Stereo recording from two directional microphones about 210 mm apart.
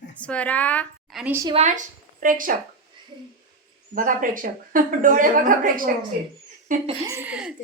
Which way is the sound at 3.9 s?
40° right (ahead or behind).